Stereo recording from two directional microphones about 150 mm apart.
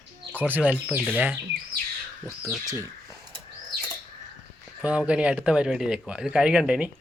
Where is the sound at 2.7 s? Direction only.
20° right (ahead or behind).